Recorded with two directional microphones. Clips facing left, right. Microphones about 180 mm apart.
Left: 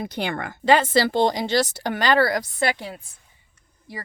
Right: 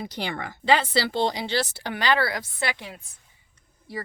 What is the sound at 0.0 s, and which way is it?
Speech, 55° left (ahead or behind).